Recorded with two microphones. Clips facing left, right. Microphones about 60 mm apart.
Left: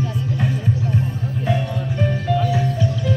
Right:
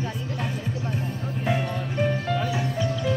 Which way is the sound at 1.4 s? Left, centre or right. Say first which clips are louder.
Left 3 dB; centre.